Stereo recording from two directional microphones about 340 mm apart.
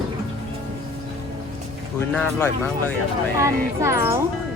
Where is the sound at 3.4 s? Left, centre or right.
Centre.